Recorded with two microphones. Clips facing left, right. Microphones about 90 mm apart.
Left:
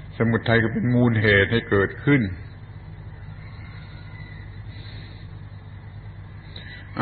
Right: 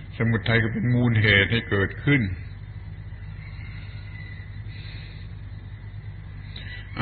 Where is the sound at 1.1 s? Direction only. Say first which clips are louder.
Left 3 dB; 25° left (ahead or behind).